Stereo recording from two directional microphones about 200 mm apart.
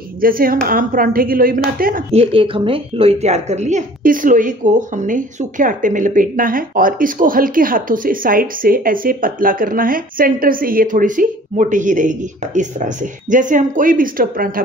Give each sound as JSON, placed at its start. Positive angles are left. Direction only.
{"t": 0.2, "sound": "a woman's voice", "side_deg": -45}
{"t": 2.1, "sound": "a woman's voice", "side_deg": -25}